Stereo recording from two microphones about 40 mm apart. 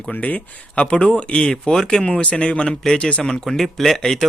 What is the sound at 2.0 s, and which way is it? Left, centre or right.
Speech, left.